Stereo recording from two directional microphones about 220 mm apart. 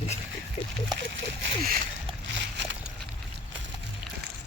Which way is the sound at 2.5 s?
55° right (ahead or behind).